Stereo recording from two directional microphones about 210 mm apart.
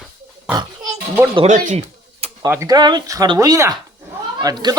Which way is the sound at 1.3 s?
35° right (ahead or behind).